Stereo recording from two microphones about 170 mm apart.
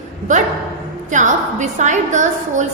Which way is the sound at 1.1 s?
45° right (ahead or behind).